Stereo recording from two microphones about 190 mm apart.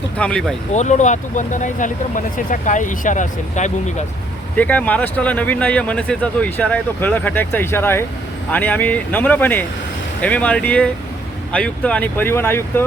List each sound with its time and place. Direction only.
0.2 s speech: 5° left (ahead or behind)
0.7 s speech: 40° left (ahead or behind)
4.5 s speech: 10° left (ahead or behind)